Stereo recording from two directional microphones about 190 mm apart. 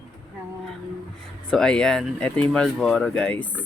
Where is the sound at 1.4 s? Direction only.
5° left (ahead or behind).